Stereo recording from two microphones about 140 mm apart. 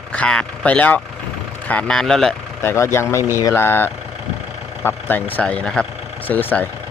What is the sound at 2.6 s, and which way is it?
Speech, 20° left (ahead or behind).